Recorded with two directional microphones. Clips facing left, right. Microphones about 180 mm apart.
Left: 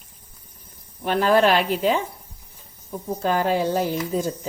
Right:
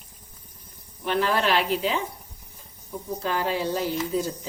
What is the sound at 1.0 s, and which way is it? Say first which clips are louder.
Speech: left 6 dB; 50° left (ahead or behind).